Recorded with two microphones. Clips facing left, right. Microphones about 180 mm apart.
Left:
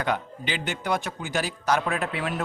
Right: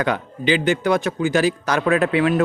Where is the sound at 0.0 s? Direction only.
90° right.